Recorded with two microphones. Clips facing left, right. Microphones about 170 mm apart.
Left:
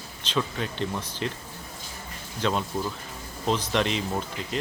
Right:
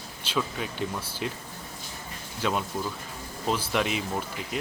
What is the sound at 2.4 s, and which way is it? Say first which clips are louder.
Speech: left 2 dB; 10° right (ahead or behind).